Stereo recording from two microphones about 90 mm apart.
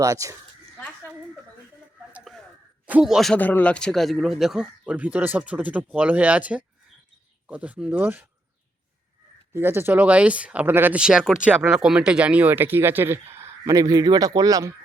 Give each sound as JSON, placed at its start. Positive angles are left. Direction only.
{"t": 0.0, "sound": "speech", "side_deg": -40}
{"t": 3.0, "sound": "speech", "side_deg": 0}
{"t": 3.3, "sound": "speech", "side_deg": 20}
{"t": 9.5, "sound": "speech", "side_deg": -25}
{"t": 11.0, "sound": "speech", "side_deg": -10}